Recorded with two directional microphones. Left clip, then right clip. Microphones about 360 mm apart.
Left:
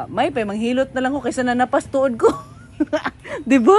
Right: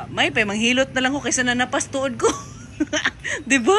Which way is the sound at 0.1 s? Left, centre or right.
Centre.